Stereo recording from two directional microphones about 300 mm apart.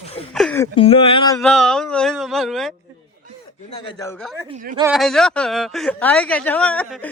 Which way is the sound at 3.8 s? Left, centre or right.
Centre.